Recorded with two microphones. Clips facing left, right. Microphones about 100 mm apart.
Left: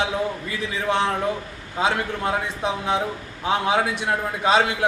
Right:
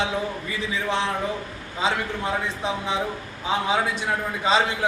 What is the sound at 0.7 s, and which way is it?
A man's voice, 60° left (ahead or behind).